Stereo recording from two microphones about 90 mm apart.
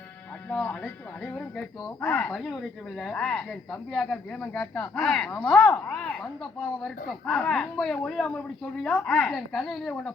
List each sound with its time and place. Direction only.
0.4 s speech: 10° left (ahead or behind)
1.8 s speech: 30° left (ahead or behind)
2.1 s speech: 5° left (ahead or behind)
4.9 s speech: 5° left (ahead or behind)